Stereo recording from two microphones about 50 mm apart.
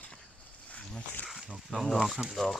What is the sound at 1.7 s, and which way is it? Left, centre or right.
Speech, centre.